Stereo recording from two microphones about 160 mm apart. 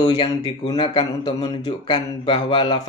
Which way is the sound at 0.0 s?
30° left (ahead or behind).